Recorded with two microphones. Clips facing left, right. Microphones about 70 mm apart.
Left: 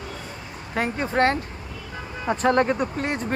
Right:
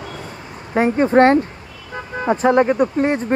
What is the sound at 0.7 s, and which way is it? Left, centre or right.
Speech, right.